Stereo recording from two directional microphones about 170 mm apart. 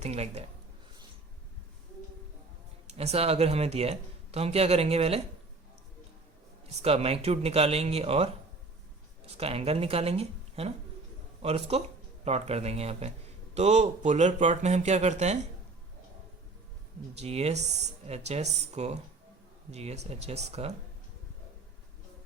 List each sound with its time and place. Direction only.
0.0 s a man's voice: 40° right (ahead or behind)
2.8 s a man's voice: 40° right (ahead or behind)
6.8 s a man's voice: 35° right (ahead or behind)
9.4 s a man's voice: 35° right (ahead or behind)
17.2 s a man's voice: 40° right (ahead or behind)